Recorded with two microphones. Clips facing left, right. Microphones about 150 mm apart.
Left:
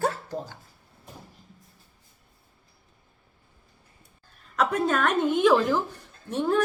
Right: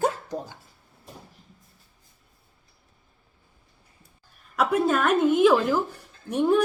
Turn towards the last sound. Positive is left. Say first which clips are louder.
# right 3 dB
turn(degrees=-10)  # may be behind; listen again after turning